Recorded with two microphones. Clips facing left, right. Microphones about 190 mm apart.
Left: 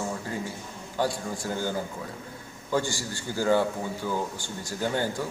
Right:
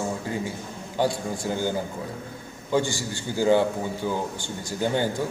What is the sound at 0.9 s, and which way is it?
A man's voice, 25° right (ahead or behind).